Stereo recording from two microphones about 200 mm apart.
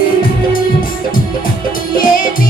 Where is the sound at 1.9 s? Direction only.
45° left (ahead or behind).